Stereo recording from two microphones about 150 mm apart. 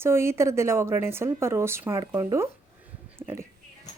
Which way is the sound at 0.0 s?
15° right (ahead or behind).